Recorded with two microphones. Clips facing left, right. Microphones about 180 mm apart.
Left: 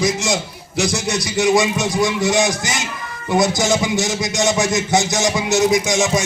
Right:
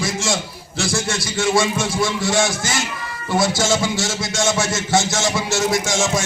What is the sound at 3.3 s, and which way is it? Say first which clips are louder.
Music: left 2 dB; 20° left (ahead or behind).